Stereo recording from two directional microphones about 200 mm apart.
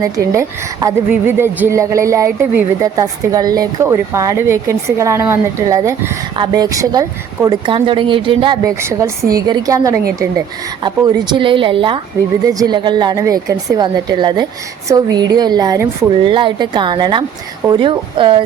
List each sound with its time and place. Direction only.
0.0 s a woman's voice: 15° right (ahead or behind)